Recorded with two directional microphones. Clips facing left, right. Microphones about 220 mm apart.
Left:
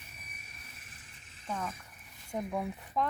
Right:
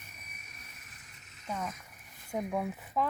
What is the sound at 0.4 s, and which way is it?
Vehicle, 30° left (ahead or behind).